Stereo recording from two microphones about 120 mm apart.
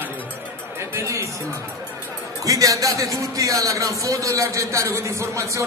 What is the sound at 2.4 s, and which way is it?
A man's voice, 30° right (ahead or behind).